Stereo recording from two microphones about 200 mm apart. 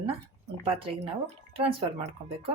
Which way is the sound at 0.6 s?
25° right (ahead or behind).